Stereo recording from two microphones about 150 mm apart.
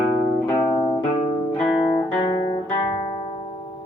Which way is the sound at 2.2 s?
30° left (ahead or behind).